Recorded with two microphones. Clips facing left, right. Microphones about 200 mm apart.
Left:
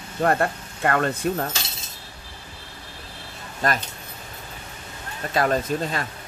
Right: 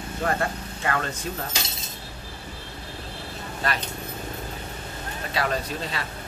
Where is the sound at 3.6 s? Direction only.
45° left (ahead or behind).